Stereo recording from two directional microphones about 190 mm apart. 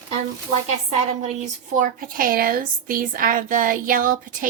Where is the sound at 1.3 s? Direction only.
40° right (ahead or behind).